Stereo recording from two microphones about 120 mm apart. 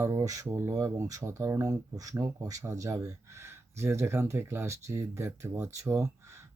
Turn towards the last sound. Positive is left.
turn(degrees=-25)  # may be behind; listen again after turning